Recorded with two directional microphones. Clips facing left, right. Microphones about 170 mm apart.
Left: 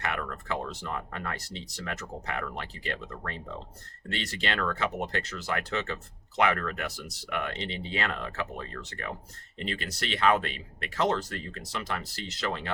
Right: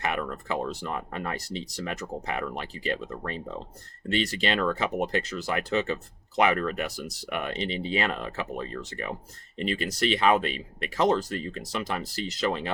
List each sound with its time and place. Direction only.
0.0 s speech: 15° right (ahead or behind)